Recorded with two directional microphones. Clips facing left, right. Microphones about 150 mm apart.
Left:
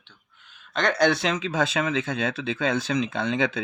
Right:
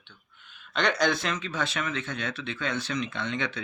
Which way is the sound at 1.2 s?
90° left.